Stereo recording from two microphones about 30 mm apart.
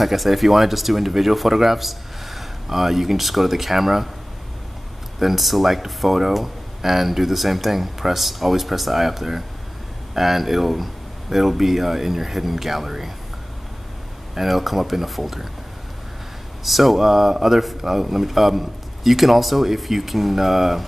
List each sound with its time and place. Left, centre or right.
0.0 s speech: centre
5.2 s speech: centre
14.3 s speech: centre
16.6 s speech: centre